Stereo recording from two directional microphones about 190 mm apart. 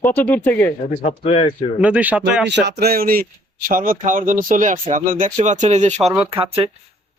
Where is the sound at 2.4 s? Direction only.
65° right (ahead or behind).